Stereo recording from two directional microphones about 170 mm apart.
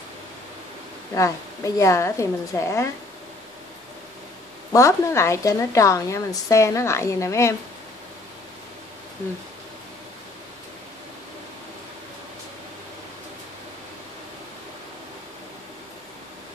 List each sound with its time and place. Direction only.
1.1 s a woman's voice: 20° left (ahead or behind)
4.7 s a woman's voice: 20° left (ahead or behind)